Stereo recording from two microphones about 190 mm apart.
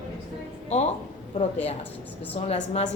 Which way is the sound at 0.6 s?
35° left (ahead or behind).